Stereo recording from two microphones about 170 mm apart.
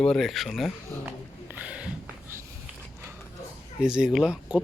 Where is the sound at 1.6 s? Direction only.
5° right (ahead or behind).